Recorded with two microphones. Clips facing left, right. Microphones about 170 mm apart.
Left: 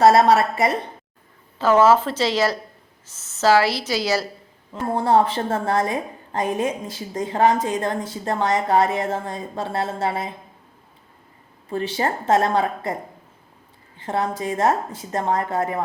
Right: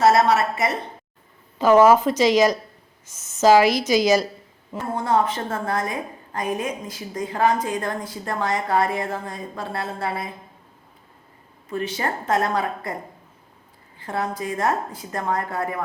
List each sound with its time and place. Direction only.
0.0 s a woman's voice: 35° left (ahead or behind)
1.5 s a woman's voice: 15° right (ahead or behind)
4.9 s a woman's voice: 30° left (ahead or behind)
11.7 s a woman's voice: 30° left (ahead or behind)
14.0 s a woman's voice: 25° left (ahead or behind)